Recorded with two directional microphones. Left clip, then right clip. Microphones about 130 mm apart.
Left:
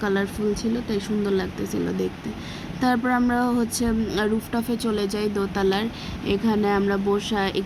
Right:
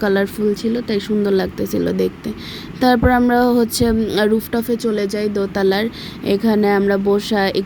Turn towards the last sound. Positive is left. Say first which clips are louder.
# right 7 dB
turn(degrees=-45)  # may be behind; listen again after turning